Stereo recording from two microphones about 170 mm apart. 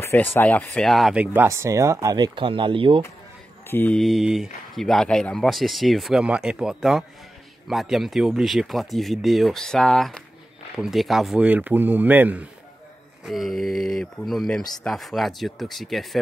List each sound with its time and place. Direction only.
0.0 s speech: 15° left (ahead or behind); by 3.0 s 30° right (ahead or behind)
3.6 s mantra: 10° left (ahead or behind)
4.0 s speech: centre (ahead or behind)